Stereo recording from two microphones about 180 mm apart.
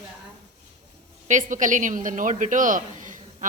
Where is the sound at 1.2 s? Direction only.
45° right (ahead or behind).